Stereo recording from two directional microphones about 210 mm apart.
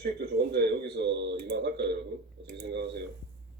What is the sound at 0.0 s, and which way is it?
Speech, 50° right (ahead or behind).